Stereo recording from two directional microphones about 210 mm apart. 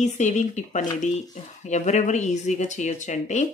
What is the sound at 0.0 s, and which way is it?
Speech, 35° left (ahead or behind).